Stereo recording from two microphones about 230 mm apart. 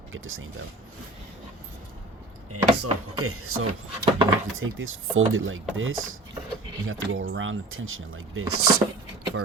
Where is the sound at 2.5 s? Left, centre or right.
Right.